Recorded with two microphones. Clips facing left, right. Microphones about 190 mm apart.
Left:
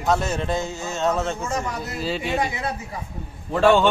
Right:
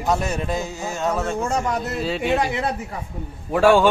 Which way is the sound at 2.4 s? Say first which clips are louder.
Right 3 dB; 65° right (ahead or behind).